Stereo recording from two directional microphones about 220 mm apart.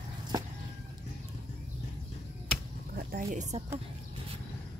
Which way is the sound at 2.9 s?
40° right (ahead or behind).